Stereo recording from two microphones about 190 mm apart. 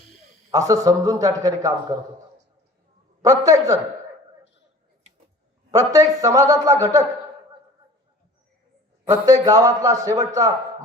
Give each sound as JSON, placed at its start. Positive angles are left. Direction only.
{"t": 0.5, "sound": "a man's voice", "side_deg": -15}
{"t": 3.2, "sound": "a man's voice", "side_deg": -20}
{"t": 5.7, "sound": "a man's voice", "side_deg": -20}
{"t": 9.0, "sound": "a man's voice", "side_deg": -15}